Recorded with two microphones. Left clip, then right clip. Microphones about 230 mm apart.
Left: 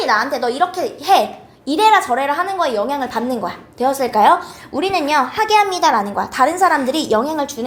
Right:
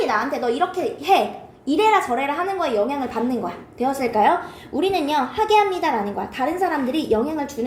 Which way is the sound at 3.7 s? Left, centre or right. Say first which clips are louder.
Left 5 dB; left.